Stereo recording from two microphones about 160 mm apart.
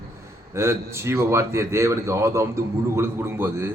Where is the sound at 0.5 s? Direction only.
15° right (ahead or behind).